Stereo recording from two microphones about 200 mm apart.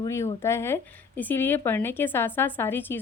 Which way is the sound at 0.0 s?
15° left (ahead or behind).